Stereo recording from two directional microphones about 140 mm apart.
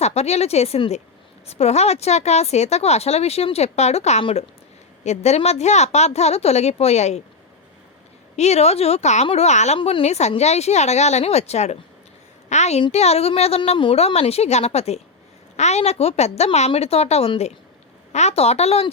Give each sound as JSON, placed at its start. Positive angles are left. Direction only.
{"t": 0.0, "sound": "speech", "side_deg": 50}
{"t": 4.2, "sound": "speech", "side_deg": 40}
{"t": 5.0, "sound": "speech", "side_deg": 50}
{"t": 8.4, "sound": "a child's voice", "side_deg": 50}